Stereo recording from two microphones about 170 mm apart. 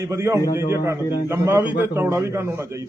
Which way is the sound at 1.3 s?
15° right (ahead or behind).